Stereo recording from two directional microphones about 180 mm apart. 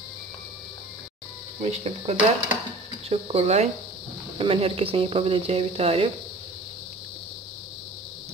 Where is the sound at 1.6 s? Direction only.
35° right (ahead or behind).